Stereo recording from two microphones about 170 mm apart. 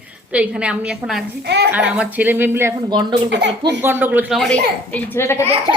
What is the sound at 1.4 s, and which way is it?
Speech, 80° right.